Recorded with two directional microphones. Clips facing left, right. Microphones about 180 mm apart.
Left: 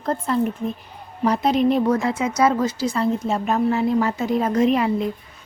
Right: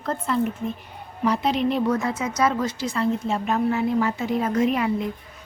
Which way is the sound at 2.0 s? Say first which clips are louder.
Left 4 dB; 30° left (ahead or behind).